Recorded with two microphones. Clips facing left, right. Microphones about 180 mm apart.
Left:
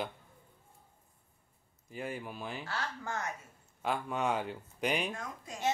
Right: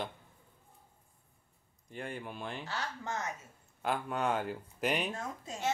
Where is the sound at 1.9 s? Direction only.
5° left (ahead or behind).